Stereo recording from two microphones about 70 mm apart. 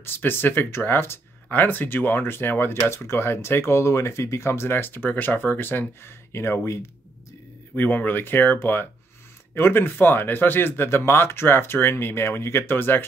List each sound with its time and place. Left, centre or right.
0.0 s speech: left
7.7 s speech: left